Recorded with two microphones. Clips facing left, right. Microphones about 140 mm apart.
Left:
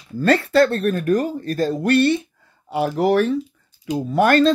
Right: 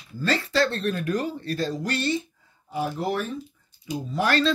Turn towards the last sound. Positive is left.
turn(degrees=50)  # may be behind; listen again after turning